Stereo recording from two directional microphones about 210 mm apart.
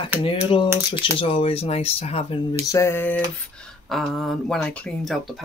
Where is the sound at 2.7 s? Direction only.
10° left (ahead or behind).